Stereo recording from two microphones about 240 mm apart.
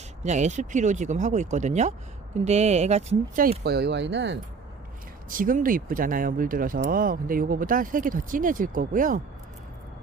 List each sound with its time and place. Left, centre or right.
0.2 s speech: right
5.3 s speech: right